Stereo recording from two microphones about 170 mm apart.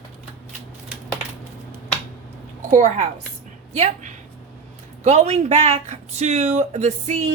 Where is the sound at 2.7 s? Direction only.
45° right (ahead or behind).